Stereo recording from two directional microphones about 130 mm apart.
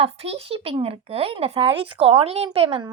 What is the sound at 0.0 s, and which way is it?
A woman's voice, 50° right (ahead or behind).